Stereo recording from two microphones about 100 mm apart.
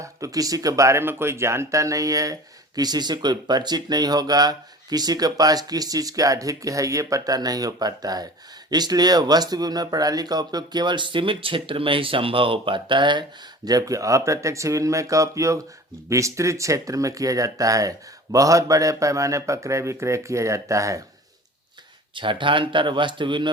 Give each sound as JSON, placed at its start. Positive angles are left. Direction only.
{"t": 0.0, "sound": "speech", "side_deg": -35}
{"t": 13.7, "sound": "speech", "side_deg": -35}
{"t": 22.1, "sound": "speech", "side_deg": -55}